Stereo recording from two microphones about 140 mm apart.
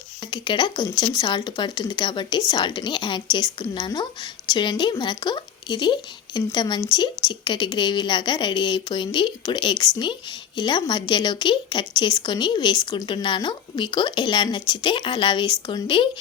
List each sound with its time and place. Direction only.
0.3 s a woman's voice: 35° left (ahead or behind)